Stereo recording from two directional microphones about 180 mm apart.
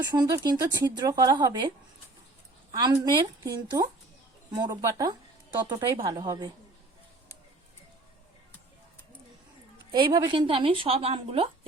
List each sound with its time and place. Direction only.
0.0 s a woman's voice: 20° right (ahead or behind)
2.7 s a woman's voice: 20° right (ahead or behind)
9.9 s a woman's voice: 25° right (ahead or behind)